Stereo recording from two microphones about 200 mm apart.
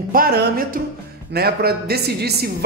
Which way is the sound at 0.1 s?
50° right (ahead or behind).